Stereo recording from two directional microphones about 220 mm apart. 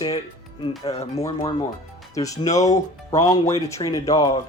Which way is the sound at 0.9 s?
30° left (ahead or behind).